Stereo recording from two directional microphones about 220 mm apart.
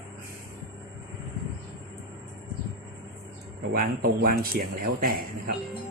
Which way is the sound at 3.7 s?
40° right (ahead or behind).